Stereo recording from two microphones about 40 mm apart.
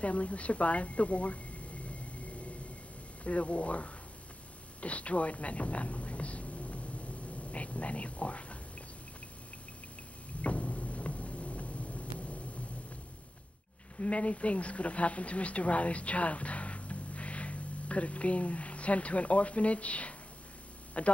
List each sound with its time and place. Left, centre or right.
0.0 s speech: left
3.3 s speech: left
10.4 s a sound: left
13.9 s speech: left